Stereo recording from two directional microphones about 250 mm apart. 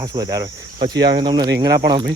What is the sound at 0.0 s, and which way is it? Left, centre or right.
Speech, centre.